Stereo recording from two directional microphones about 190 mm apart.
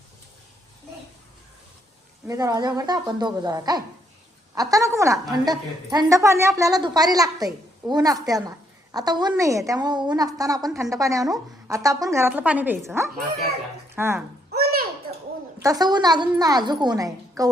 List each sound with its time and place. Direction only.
2.2 s a woman's voice: 20° right (ahead or behind)
14.5 s a sound: 55° right (ahead or behind)
15.6 s a woman's voice: 20° right (ahead or behind)